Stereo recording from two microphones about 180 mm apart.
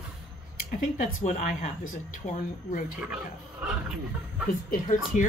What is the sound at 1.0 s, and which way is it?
Speech, 45° left (ahead or behind).